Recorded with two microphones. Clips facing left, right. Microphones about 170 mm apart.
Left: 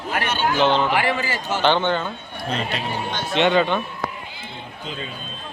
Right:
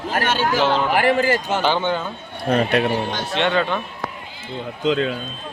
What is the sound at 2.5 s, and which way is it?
Speech, 60° right (ahead or behind).